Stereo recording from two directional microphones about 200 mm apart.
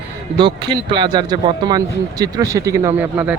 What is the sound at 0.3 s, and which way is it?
Speech, 25° right (ahead or behind).